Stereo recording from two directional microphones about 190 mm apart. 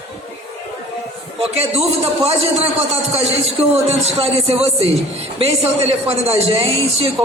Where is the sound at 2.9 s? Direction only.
30° right (ahead or behind).